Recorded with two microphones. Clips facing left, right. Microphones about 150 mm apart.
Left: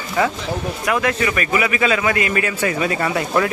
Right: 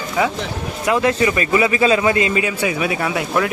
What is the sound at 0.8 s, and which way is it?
A man's voice, 25° right (ahead or behind).